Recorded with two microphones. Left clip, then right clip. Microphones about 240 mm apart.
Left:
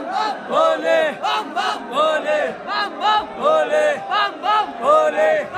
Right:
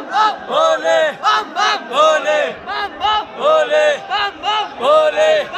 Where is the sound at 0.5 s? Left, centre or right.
Right.